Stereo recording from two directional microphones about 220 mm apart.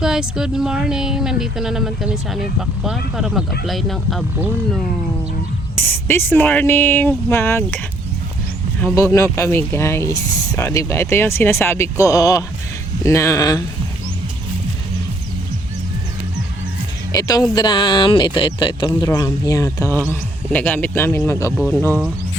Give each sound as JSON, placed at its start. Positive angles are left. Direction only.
{"t": 0.0, "sound": "speech", "side_deg": -5}
{"t": 5.8, "sound": "speech", "side_deg": 10}
{"t": 8.8, "sound": "speech", "side_deg": 10}
{"t": 17.1, "sound": "music", "side_deg": 15}
{"t": 17.5, "sound": "speech", "side_deg": 20}